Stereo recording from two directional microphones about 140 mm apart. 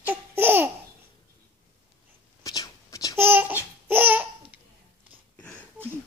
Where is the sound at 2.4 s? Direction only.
25° left (ahead or behind).